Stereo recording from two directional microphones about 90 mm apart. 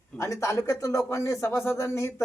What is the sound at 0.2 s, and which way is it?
Speech, 35° left (ahead or behind).